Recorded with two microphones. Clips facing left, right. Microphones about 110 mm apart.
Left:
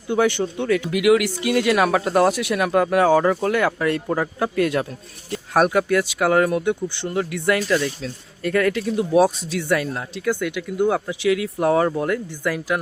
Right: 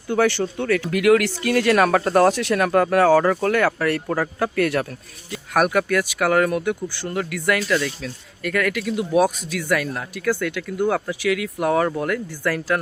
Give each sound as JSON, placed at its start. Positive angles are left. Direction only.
{"t": 0.1, "sound": "speech", "side_deg": 20}